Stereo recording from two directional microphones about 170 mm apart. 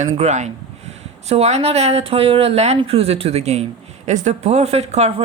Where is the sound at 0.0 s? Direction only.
45° right (ahead or behind).